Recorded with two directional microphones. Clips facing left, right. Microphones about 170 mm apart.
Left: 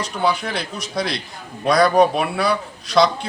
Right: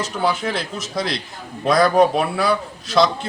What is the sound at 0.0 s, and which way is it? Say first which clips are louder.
A man's voice: even; centre (ahead or behind).